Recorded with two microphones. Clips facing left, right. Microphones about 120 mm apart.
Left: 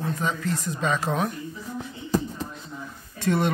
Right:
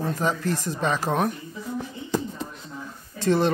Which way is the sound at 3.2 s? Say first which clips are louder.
Right 3 dB; 30° right (ahead or behind).